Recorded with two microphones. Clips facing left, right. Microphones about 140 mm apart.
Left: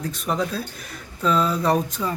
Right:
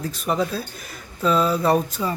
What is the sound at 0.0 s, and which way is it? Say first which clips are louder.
Speech: right 2 dB; 5° right (ahead or behind).